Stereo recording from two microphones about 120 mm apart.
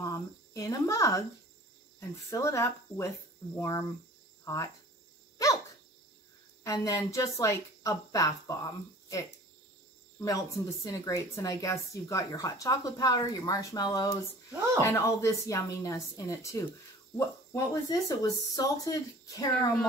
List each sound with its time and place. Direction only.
0.0 s cricket: 30° left (ahead or behind)
2.0 s speech: 25° left (ahead or behind)
6.6 s speech: 25° left (ahead or behind)